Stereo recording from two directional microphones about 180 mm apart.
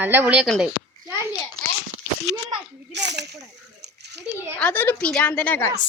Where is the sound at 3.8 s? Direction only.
70° right (ahead or behind).